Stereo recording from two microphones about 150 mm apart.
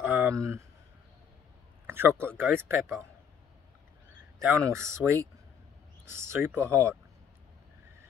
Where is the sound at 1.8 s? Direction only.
15° right (ahead or behind).